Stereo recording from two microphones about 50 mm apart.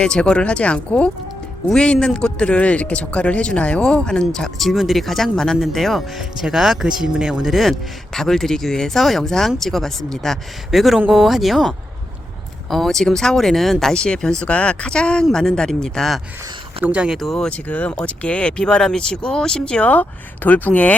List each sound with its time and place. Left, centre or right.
0.0 s speech: centre
6.4 s speech: centre
10.7 s speech: centre
12.7 s speech: centre
13.9 s speech: centre
16.8 s speech: right
17.2 s speech: centre
17.5 s speech: left
19.8 s speech: left